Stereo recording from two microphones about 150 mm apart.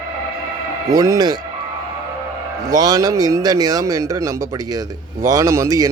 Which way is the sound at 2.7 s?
25° right (ahead or behind).